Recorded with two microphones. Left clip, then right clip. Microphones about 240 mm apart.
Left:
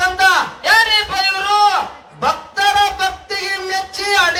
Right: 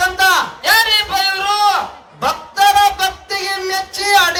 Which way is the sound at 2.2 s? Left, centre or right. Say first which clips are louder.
Right 2 dB; right.